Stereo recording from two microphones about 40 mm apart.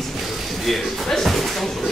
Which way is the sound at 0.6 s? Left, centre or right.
Centre.